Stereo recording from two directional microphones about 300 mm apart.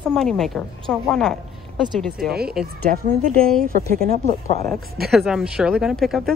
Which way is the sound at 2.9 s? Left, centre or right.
Right.